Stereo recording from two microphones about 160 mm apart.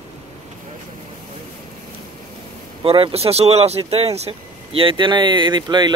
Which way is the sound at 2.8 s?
35° right (ahead or behind).